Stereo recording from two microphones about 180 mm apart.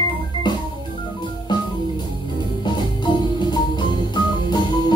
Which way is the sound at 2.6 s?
25° left (ahead or behind).